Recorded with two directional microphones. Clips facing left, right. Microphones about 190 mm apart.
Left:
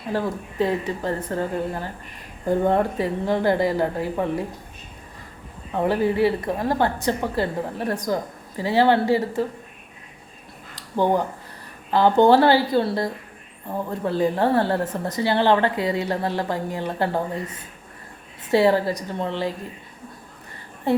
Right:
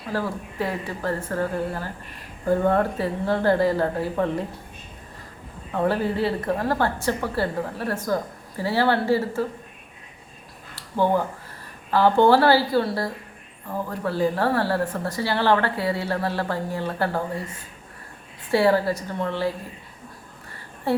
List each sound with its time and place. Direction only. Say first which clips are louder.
0.1 s a woman's voice: left 2 dB; 20° left (ahead or behind)
5.7 s a woman's voice: left 2 dB; 15° left (ahead or behind)
10.8 s a woman's voice: left 1 dB; 15° left (ahead or behind)
20.9 s speech: left 2 dB; 20° left (ahead or behind)